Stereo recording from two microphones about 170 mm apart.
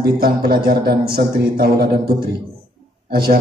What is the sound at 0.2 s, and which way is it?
A man's voice, 60° right (ahead or behind).